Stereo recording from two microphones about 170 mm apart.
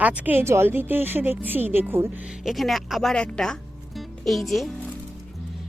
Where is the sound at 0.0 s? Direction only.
10° right (ahead or behind).